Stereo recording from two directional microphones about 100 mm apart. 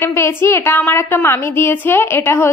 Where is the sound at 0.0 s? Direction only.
25° left (ahead or behind).